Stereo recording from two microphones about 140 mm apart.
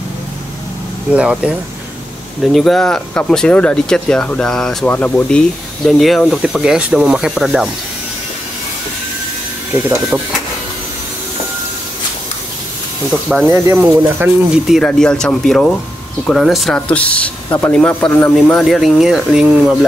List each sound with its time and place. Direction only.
1.1 s speech: 10° right (ahead or behind)
9.8 s speech: 15° right (ahead or behind)
13.1 s speech: 5° left (ahead or behind)
13.5 s speech: 20° right (ahead or behind)
14.5 s speech: 5° right (ahead or behind)